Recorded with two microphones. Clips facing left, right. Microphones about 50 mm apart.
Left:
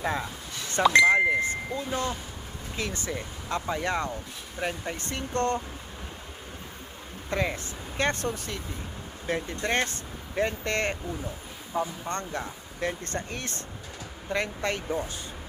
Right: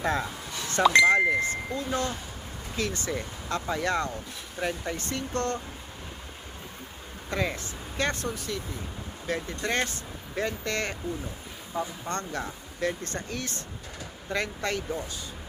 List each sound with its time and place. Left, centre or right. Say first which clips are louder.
0.0 s speech: right 2 dB; centre
1.4 s a sound: even; left
1.9 s speech: right 1 dB; left
7.3 s speech: left 1 dB; centre
7.5 s speech: left 1 dB; left
9.2 s speech: left 1 dB; left
11.7 s speech: left 2 dB; centre; by 13.6 s left
14.3 s speech: left 1 dB; left